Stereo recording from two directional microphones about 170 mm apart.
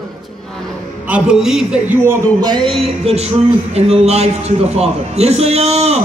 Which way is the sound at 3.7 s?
40° right (ahead or behind).